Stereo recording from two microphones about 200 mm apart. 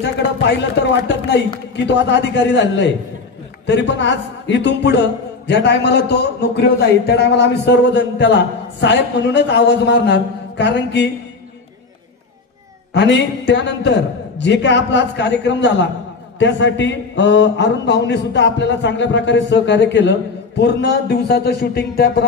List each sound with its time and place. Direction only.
0.0 s a man's voice: 60° left (ahead or behind)
1.9 s a man's voice: 65° left (ahead or behind)
12.9 s a man's voice: 60° left (ahead or behind)